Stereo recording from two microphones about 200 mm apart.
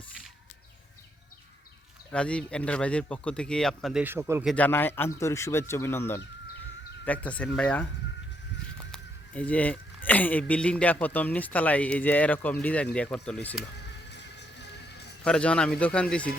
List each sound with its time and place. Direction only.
2.1 s speech: 5° left (ahead or behind)
4.0 s speech: 10° right (ahead or behind)
4.5 s speech: 10° left (ahead or behind)
8.9 s speech: 5° left (ahead or behind)
13.7 s music: 60° left (ahead or behind)
15.2 s speech: 5° left (ahead or behind)